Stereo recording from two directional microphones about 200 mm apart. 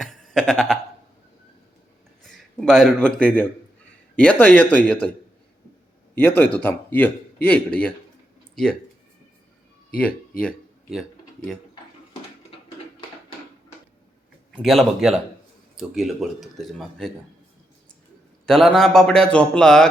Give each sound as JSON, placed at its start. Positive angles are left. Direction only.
{"t": 0.0, "sound": "a sound", "side_deg": 0}
{"t": 2.6, "sound": "a man's voice", "side_deg": 0}
{"t": 6.1, "sound": "speech", "side_deg": 10}
{"t": 14.5, "sound": "a man's voice", "side_deg": 0}
{"t": 18.4, "sound": "a man's voice", "side_deg": 0}